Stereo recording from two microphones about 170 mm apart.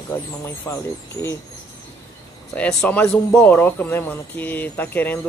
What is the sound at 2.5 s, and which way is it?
Speech, 5° left (ahead or behind).